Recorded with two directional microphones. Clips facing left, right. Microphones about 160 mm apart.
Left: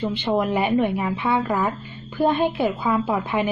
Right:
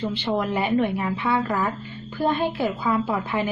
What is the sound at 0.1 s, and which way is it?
A woman's voice, 20° left (ahead or behind).